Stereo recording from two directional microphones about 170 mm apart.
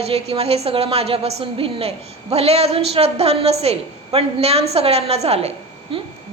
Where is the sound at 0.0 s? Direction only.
35° right (ahead or behind).